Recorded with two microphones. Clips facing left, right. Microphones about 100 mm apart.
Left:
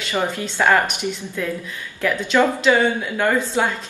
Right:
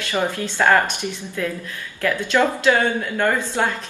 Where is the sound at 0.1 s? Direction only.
15° left (ahead or behind).